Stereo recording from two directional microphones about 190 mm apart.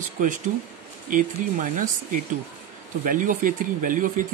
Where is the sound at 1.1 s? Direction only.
45° right (ahead or behind).